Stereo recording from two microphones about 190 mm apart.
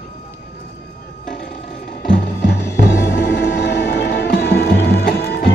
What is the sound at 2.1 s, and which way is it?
Music, 55° left (ahead or behind).